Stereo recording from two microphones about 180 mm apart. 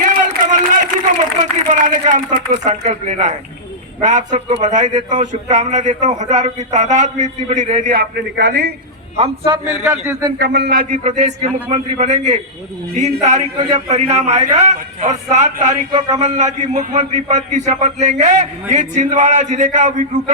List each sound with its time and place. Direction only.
0.0 s a sound: 45° right (ahead or behind)
1.6 s a man's voice: 45° right (ahead or behind)
9.1 s a man's voice: 30° right (ahead or behind)
9.8 s speech: 15° right (ahead or behind)
10.3 s a man's voice: 65° right (ahead or behind); by 20.3 s 45° right (ahead or behind)